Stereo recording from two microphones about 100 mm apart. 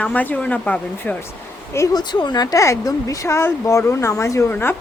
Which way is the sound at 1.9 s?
45° left (ahead or behind).